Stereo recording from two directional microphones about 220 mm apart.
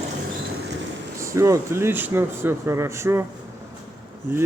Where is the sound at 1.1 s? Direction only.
15° right (ahead or behind).